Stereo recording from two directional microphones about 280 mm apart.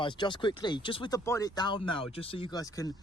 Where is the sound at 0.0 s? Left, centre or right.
Centre.